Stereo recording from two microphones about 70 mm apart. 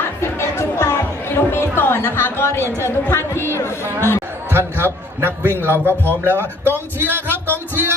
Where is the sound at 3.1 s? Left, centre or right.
Left.